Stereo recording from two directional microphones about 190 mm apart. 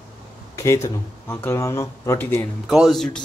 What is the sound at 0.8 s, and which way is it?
Speech, 10° left (ahead or behind).